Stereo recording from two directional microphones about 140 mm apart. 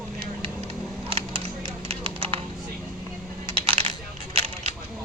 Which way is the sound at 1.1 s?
45° right (ahead or behind).